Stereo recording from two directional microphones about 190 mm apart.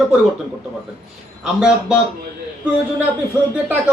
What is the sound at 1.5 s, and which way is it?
Speech, 5° right (ahead or behind).